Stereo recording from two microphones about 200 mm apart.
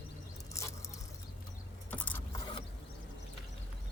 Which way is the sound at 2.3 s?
25° left (ahead or behind).